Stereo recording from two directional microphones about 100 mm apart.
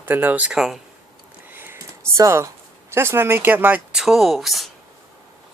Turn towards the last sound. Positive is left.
turn(degrees=0)  # may be behind; listen again after turning